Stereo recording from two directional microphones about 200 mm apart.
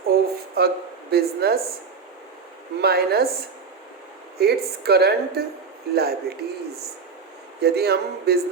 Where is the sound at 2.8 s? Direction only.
50° right (ahead or behind).